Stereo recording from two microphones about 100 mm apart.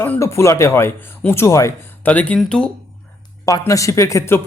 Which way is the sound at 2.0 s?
15° left (ahead or behind).